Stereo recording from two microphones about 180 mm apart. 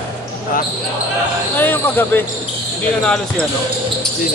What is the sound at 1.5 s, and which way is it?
Speech, 10° left (ahead or behind).